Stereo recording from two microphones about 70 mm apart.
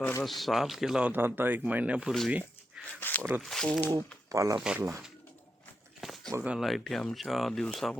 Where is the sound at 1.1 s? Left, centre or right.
Right.